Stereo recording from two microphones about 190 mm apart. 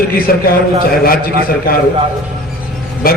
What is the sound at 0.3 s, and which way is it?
A man's voice, 50° left (ahead or behind).